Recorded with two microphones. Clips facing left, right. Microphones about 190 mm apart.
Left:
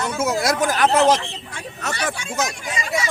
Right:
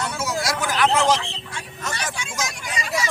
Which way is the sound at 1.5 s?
65° left (ahead or behind).